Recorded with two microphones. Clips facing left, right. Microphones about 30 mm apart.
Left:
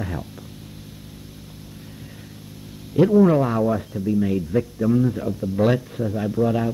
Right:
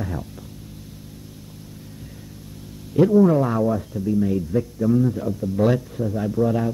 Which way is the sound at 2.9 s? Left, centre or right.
Centre.